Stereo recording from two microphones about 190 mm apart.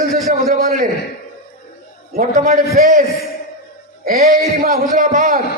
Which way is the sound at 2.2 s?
45° right (ahead or behind).